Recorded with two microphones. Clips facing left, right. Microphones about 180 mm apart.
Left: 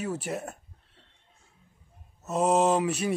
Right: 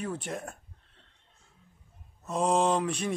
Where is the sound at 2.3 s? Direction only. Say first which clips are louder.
Left 3 dB; 5° left (ahead or behind).